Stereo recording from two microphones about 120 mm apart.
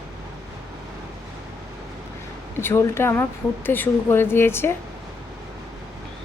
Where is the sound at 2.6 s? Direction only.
20° left (ahead or behind).